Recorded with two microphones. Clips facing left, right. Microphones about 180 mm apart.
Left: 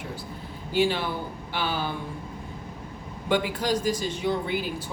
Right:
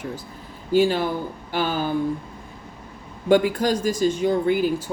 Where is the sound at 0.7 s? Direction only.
45° right (ahead or behind).